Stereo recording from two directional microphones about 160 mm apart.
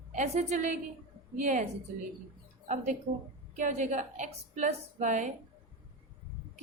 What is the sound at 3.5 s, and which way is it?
A woman's voice, 50° right (ahead or behind).